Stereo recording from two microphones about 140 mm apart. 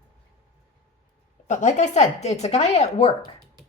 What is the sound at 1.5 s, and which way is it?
A woman's voice, 55° left (ahead or behind).